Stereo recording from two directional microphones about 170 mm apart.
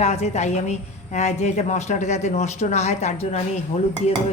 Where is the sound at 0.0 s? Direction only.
40° left (ahead or behind).